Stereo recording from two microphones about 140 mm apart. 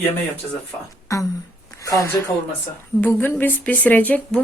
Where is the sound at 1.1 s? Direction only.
25° left (ahead or behind).